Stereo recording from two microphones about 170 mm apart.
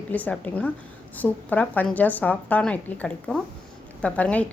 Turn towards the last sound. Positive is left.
turn(degrees=10)  # may be behind; listen again after turning